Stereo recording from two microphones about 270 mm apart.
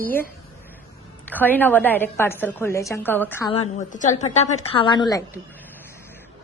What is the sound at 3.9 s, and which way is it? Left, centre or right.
A woman's voice, left.